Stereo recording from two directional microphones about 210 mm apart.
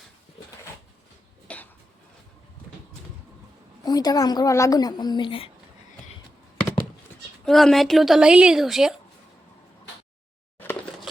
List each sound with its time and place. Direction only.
1.5 s a sound: 5° left (ahead or behind)
3.8 s a woman's voice: 20° left (ahead or behind)
7.4 s a woman's voice: centre (ahead or behind)